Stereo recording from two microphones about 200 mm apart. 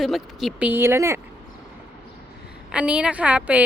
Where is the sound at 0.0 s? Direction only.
Centre (ahead or behind).